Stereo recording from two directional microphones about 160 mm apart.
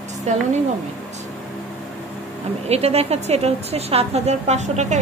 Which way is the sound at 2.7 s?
40° right (ahead or behind).